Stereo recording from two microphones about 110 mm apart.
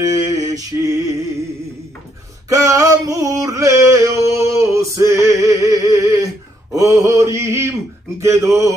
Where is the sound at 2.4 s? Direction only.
30° right (ahead or behind).